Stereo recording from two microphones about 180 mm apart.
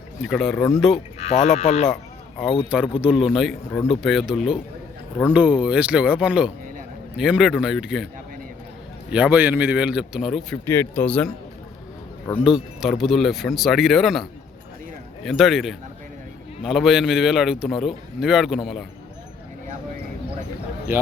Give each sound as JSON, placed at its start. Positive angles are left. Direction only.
{"t": 0.2, "sound": "a man's voice", "side_deg": 0}
{"t": 0.9, "sound": "speech", "side_deg": 35}
{"t": 2.4, "sound": "a man's voice", "side_deg": -5}
{"t": 9.0, "sound": "a man's voice", "side_deg": -5}
{"t": 10.7, "sound": "speech", "side_deg": 10}
{"t": 12.3, "sound": "speech", "side_deg": 15}
{"t": 12.8, "sound": "a man's voice", "side_deg": 0}